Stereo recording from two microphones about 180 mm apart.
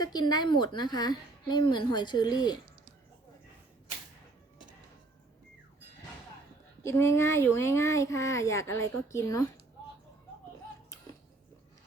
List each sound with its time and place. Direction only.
0.0 s a woman's voice: 20° left (ahead or behind)
6.8 s a child's voice: 15° left (ahead or behind)